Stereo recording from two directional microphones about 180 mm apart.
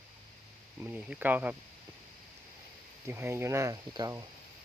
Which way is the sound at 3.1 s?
15° right (ahead or behind).